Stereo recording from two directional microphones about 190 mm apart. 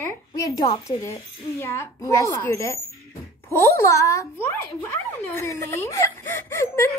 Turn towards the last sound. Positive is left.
turn(degrees=10)  # may be behind; listen again after turning